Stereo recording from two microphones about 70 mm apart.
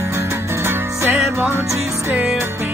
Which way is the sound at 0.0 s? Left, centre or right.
Right.